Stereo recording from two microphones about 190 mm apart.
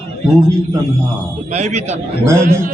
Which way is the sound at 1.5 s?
35° right (ahead or behind).